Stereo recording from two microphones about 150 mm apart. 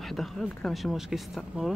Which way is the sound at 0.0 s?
Centre (ahead or behind).